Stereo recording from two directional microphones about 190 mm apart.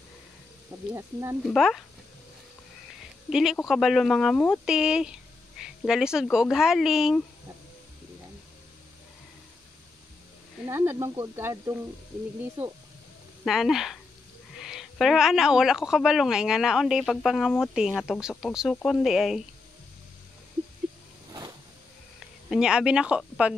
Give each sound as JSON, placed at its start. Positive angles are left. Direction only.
{"t": 1.4, "sound": "a woman's voice", "side_deg": 0}
{"t": 3.3, "sound": "a woman's voice", "side_deg": -5}
{"t": 10.7, "sound": "speech", "side_deg": -15}
{"t": 13.4, "sound": "a woman's voice", "side_deg": 0}
{"t": 21.3, "sound": "a sound", "side_deg": -20}
{"t": 22.5, "sound": "a woman's voice", "side_deg": -5}